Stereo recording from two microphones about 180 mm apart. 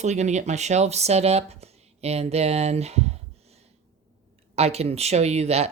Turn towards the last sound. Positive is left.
turn(degrees=-35)  # may be behind; listen again after turning